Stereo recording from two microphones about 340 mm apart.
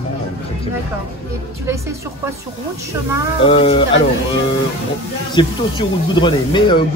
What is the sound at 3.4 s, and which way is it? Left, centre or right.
Speech, centre.